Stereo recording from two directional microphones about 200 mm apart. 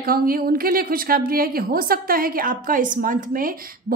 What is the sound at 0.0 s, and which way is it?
A woman's voice, 45° right (ahead or behind).